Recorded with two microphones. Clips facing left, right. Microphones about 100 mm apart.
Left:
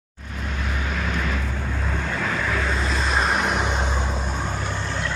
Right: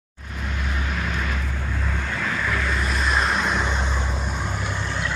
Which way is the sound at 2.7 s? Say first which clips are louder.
Even; 25° left (ahead or behind).